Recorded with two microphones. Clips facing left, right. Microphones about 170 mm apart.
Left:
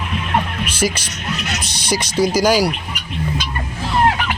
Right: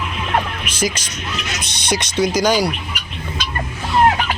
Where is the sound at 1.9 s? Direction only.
5° left (ahead or behind).